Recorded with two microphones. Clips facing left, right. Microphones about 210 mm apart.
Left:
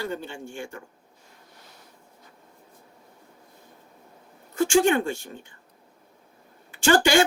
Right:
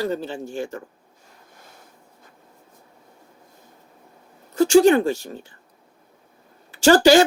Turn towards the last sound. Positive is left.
turn(degrees=-35)  # may be behind; listen again after turning